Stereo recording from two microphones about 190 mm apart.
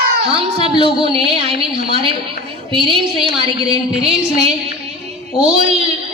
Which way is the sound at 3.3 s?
30° right (ahead or behind).